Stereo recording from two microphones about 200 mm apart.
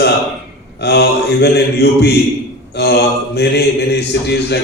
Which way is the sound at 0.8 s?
55° left (ahead or behind).